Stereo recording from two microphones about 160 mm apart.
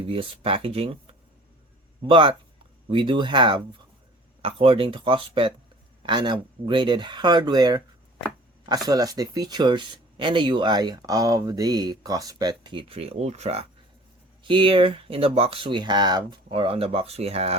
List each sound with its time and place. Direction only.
0.0 s speech: 35° right (ahead or behind)
2.0 s speech: 30° right (ahead or behind)